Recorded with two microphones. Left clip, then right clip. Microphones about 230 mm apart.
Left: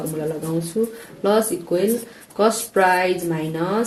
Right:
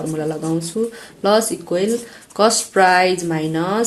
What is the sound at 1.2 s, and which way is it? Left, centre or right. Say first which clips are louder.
Speech: right 3 dB; right.